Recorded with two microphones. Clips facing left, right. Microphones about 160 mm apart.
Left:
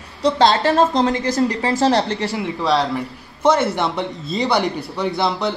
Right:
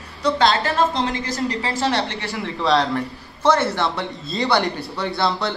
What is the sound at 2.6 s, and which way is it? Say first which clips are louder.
Speech: even; centre (ahead or behind).